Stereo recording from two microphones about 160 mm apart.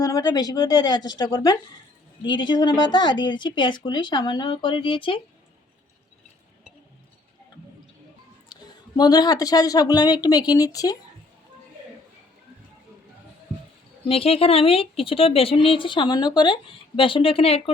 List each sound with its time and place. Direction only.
0.0 s speech: 25° left (ahead or behind)
8.5 s a sound: 25° left (ahead or behind)
9.0 s speech: 25° left (ahead or behind)
14.1 s speech: 35° left (ahead or behind)